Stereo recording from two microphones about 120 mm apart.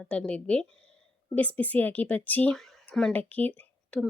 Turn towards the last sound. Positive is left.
turn(degrees=10)  # may be behind; listen again after turning